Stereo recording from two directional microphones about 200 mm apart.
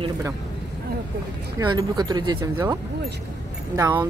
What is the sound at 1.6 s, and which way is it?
Speech, 20° right (ahead or behind).